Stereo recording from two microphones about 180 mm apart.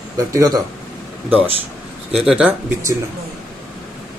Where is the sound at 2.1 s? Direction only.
5° right (ahead or behind).